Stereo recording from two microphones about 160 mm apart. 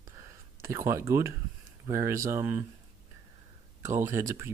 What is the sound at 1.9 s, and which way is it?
Speech, 15° right (ahead or behind).